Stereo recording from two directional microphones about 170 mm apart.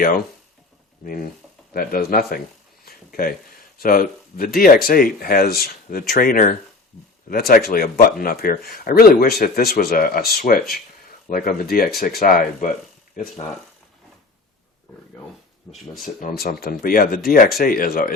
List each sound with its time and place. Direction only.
1.7 s speech: 60° left (ahead or behind)
15.7 s speech: 10° left (ahead or behind)
16.2 s speech: 60° left (ahead or behind)